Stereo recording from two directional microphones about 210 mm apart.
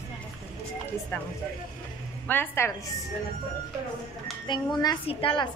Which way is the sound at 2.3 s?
10° left (ahead or behind).